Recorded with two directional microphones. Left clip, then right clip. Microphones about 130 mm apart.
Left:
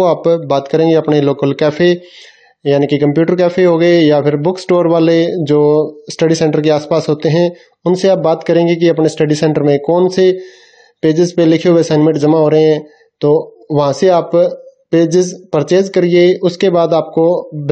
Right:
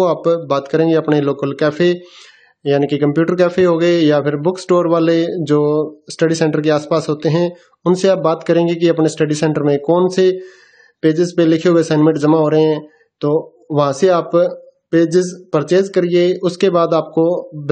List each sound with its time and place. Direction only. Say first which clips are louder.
0.0 s a man's voice: left 3 dB; 20° left (ahead or behind)